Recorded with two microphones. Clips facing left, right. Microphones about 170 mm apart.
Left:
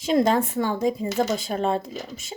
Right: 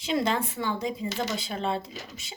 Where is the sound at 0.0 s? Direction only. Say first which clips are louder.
Left 7 dB; 45° left (ahead or behind).